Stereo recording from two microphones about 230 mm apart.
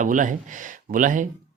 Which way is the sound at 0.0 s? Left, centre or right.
Right.